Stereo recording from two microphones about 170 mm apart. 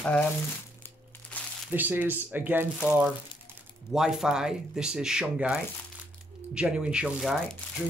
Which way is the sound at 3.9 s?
5° right (ahead or behind).